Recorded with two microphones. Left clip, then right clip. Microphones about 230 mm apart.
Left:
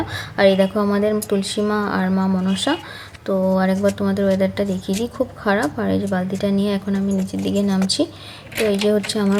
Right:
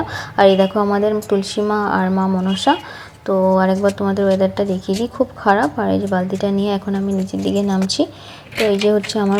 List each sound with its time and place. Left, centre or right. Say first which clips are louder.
0.1 s speech: right 3 dB; centre